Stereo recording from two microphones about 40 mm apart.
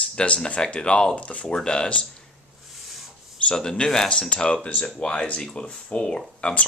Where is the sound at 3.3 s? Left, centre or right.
Centre.